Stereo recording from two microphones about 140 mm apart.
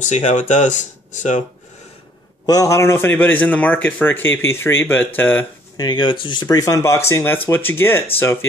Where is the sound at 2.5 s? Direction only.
25° left (ahead or behind).